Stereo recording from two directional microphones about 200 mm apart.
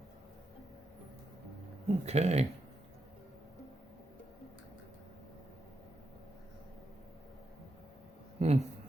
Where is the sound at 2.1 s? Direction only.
35° right (ahead or behind).